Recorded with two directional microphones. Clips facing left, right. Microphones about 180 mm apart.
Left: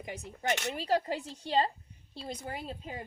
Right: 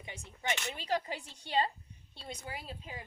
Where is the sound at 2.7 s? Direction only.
45° left (ahead or behind).